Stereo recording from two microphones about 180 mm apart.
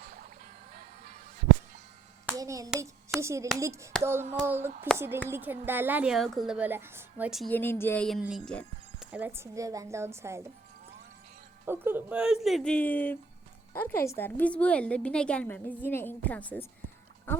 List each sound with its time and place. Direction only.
0.0 s music: 55° right (ahead or behind)
2.2 s clapping: 20° right (ahead or behind)
3.2 s a woman's voice: 15° right (ahead or behind)
7.5 s a woman's voice: 10° left (ahead or behind)
8.4 s music: 5° left (ahead or behind)
9.1 s a woman's voice: 10° right (ahead or behind)
11.6 s a woman's voice: 10° right (ahead or behind); by 16.6 s 10° left (ahead or behind)
17.3 s a sound: 10° left (ahead or behind)